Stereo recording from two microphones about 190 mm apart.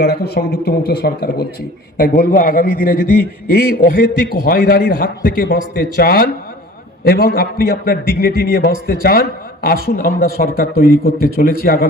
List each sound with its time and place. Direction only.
0.0 s a man's voice: 55° left (ahead or behind)